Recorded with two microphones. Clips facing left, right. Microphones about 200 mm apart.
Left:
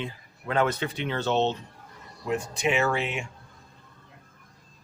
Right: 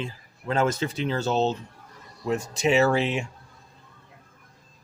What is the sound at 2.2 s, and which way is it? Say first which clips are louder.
Speech: right 3 dB; 35° right (ahead or behind).